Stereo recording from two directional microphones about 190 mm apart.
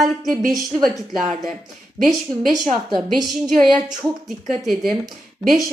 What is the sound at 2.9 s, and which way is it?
A woman's voice, centre (ahead or behind).